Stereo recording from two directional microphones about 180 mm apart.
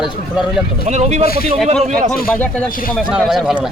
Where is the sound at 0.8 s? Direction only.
40° right (ahead or behind).